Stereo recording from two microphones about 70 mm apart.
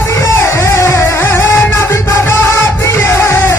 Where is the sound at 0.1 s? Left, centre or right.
Left.